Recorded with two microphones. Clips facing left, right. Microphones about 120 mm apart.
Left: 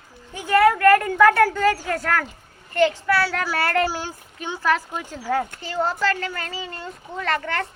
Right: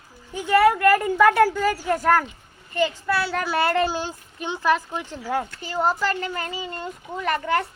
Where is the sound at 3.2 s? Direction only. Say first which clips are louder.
Right 2 dB; 20° right (ahead or behind).